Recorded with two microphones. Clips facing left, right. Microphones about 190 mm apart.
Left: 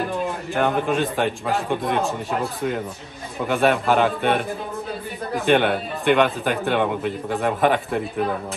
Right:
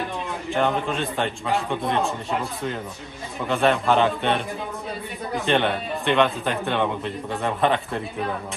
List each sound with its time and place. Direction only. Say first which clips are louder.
0.5 s a man's voice: left 1 dB; 5° left (ahead or behind)
3.4 s speech: left 1 dB; 5° left (ahead or behind)